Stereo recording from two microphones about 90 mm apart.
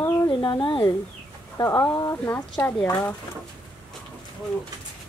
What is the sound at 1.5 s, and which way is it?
Speech, 30° left (ahead or behind).